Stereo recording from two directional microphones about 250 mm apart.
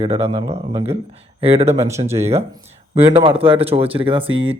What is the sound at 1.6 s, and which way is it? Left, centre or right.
Speech, centre.